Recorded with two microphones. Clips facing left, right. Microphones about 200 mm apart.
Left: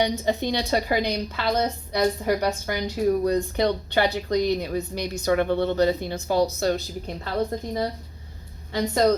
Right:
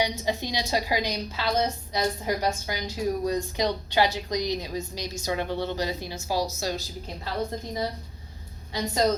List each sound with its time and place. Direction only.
0.0 s a woman's voice: 55° left (ahead or behind)
8.7 s a woman's voice: 55° left (ahead or behind)